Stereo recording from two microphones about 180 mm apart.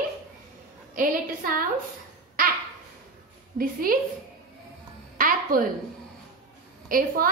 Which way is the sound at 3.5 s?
50° right (ahead or behind).